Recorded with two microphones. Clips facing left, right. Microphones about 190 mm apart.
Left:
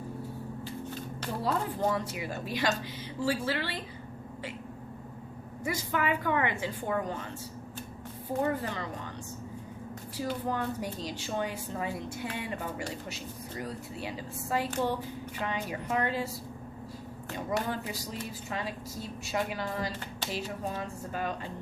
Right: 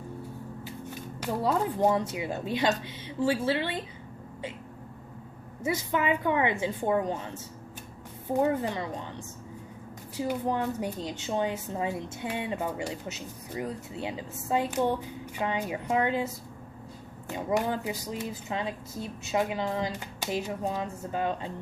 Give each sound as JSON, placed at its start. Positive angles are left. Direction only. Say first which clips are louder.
{"t": 0.6, "sound": "a woman's voice", "louder": "left 1 dB", "side_deg": -15}
{"t": 5.6, "sound": "a woman's voice", "louder": "right 3 dB", "side_deg": -20}
{"t": 8.4, "sound": "a woman's voice", "louder": "right 4 dB", "side_deg": -15}
{"t": 10.2, "sound": "a woman's voice", "louder": "right 4 dB", "side_deg": -15}